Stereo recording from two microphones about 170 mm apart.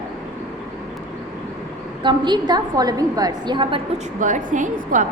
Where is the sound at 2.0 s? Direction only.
25° right (ahead or behind).